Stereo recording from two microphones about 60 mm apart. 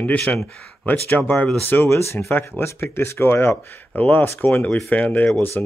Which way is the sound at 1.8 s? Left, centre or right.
Left.